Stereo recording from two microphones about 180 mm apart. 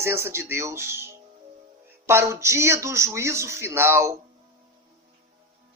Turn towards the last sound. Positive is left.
turn(degrees=-15)  # may be behind; listen again after turning